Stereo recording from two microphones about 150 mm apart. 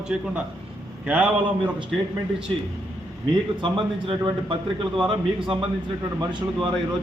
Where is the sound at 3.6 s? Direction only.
30° right (ahead or behind).